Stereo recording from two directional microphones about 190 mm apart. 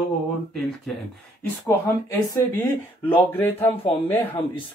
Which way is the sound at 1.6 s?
15° left (ahead or behind).